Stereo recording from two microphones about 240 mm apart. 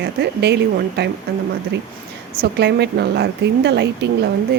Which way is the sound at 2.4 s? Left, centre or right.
Right.